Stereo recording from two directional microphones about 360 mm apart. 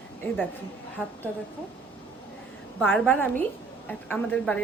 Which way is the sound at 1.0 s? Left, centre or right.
Centre.